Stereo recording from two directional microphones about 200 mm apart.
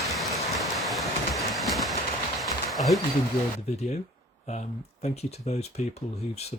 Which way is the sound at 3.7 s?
35° left (ahead or behind).